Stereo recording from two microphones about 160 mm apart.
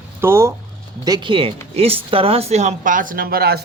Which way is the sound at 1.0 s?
25° right (ahead or behind).